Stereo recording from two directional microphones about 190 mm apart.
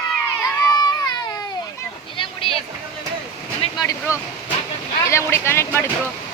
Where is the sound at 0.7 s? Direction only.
20° left (ahead or behind).